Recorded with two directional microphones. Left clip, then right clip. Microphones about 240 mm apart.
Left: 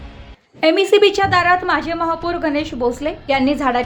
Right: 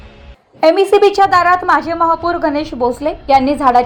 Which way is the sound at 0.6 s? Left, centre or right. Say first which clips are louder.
Right 3 dB; centre.